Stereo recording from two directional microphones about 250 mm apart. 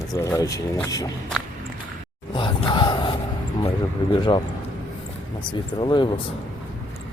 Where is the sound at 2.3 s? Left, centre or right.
Centre.